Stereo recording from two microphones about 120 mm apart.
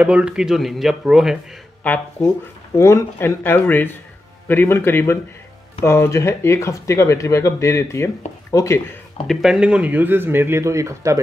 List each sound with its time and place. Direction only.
0.0 s speech: 10° right (ahead or behind)
1.8 s speech: 20° left (ahead or behind)
9.3 s speech: 5° right (ahead or behind); by 11.1 s 25° right (ahead or behind)